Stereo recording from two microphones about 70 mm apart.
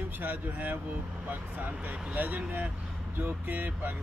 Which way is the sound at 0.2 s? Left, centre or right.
Right.